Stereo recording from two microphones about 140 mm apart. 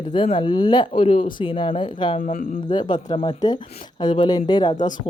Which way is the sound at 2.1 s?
55° left (ahead or behind).